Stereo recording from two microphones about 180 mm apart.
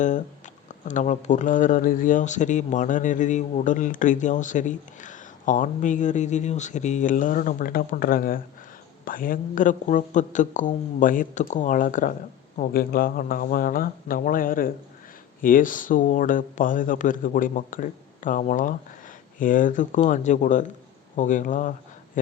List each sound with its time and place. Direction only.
0.0 s speech: 45° left (ahead or behind)